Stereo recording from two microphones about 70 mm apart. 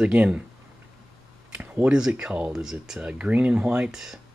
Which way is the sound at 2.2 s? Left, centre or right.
Centre.